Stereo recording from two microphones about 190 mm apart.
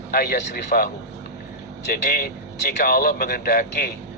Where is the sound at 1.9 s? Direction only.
50° left (ahead or behind).